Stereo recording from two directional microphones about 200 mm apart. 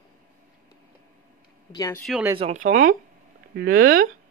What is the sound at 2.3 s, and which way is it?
Speech, 35° right (ahead or behind).